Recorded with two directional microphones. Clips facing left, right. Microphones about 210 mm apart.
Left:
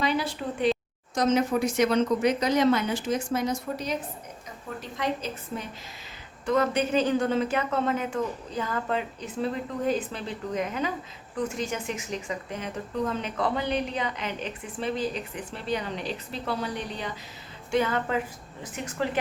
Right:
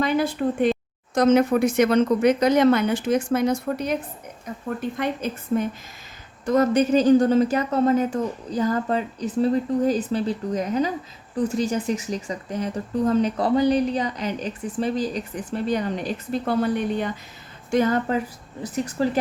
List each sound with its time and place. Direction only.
0.0 s a woman's voice: 50° right (ahead or behind)
6.4 s speech: 40° right (ahead or behind)
17.7 s speech: 40° right (ahead or behind)